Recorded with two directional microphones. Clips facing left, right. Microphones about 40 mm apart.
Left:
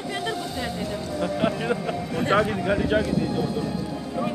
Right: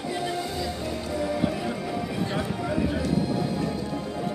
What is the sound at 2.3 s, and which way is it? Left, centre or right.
Speech, left.